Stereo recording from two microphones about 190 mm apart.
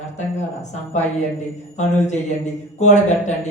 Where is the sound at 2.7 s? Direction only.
40° left (ahead or behind).